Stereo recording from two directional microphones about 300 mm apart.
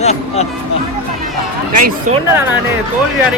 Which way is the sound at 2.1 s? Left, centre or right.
Right.